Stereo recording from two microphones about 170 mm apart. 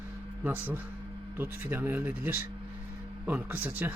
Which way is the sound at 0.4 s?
10° right (ahead or behind).